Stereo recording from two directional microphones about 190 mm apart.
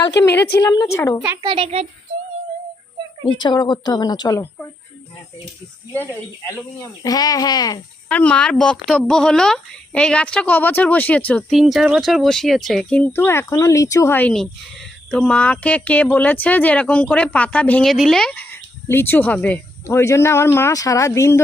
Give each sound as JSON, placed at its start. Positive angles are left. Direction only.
{"t": 0.6, "sound": "a woman's voice", "side_deg": 20}
{"t": 1.4, "sound": "a child's voice", "side_deg": -30}
{"t": 3.4, "sound": "a woman's voice", "side_deg": 20}
{"t": 7.0, "sound": "a woman's voice", "side_deg": 20}
{"t": 8.1, "sound": "speech", "side_deg": 5}